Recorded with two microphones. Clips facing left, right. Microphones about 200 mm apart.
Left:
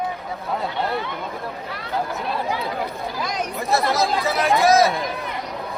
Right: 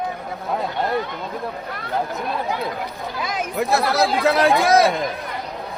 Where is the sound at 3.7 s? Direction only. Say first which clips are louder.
Even; 60° right (ahead or behind).